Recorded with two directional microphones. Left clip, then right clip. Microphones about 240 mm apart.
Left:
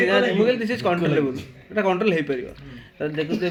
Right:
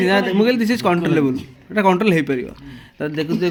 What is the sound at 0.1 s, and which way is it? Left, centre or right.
A man's voice, right.